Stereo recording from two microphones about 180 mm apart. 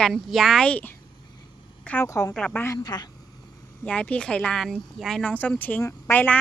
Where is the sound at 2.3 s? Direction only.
5° left (ahead or behind); by 3.1 s 20° left (ahead or behind).